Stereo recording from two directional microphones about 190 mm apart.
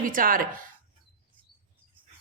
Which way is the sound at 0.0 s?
45° right (ahead or behind).